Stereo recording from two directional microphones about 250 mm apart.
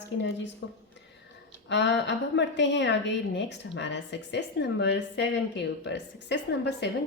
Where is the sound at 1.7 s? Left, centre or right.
Left.